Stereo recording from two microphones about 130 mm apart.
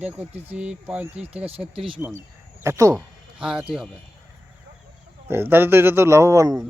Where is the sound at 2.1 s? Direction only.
20° right (ahead or behind).